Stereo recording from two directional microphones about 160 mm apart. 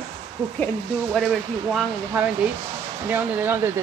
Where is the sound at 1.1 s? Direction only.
Centre (ahead or behind).